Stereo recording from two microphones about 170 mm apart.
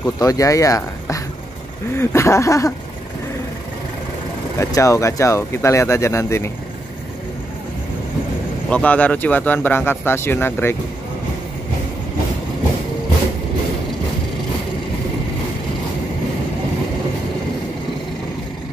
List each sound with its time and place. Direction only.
0.0 s speech: 20° left (ahead or behind)
4.6 s speech: 20° left (ahead or behind)
8.6 s speech: 5° left (ahead or behind)